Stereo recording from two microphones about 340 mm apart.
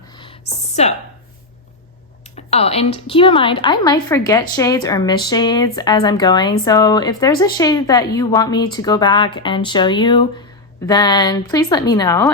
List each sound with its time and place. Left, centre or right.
0.8 s a woman's voice: centre
2.3 s speech: centre